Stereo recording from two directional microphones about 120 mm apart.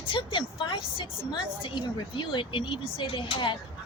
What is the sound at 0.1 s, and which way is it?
A woman's voice, 45° left (ahead or behind).